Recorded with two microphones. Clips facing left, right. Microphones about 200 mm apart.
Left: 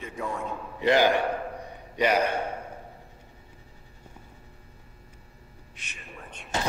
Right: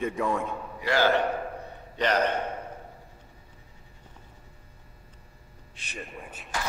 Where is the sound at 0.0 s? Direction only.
90° right.